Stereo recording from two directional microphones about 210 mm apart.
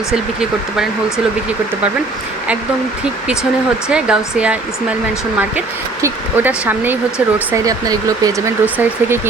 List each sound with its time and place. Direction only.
0.1 s speech: centre (ahead or behind)
3.8 s speech: 5° right (ahead or behind)